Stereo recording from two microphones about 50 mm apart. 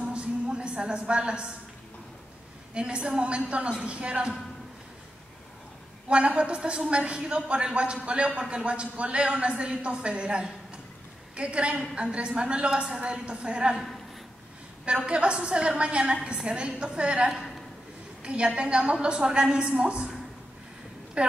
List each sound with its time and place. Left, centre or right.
0.0 s a sound: right
2.7 s a woman's voice: right
6.0 s a woman's voice: right
14.9 s a woman's voice: right
21.2 s speech: right